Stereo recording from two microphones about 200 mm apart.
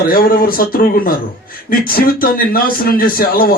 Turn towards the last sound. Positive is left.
turn(degrees=45)  # may be behind; listen again after turning